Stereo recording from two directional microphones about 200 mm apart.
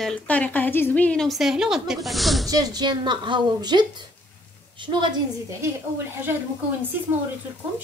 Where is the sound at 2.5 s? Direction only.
20° right (ahead or behind).